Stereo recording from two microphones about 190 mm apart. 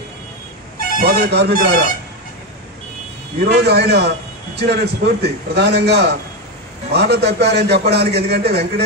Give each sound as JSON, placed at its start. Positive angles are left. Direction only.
{"t": 1.0, "sound": "speech", "side_deg": -60}
{"t": 3.3, "sound": "a man's voice", "side_deg": -60}